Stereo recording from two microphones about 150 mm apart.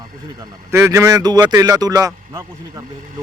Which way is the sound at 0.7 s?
20° right (ahead or behind).